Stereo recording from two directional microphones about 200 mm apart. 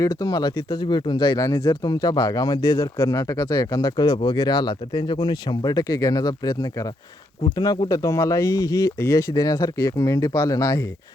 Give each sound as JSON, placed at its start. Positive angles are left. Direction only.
{"t": 0.0, "sound": "speech", "side_deg": 15}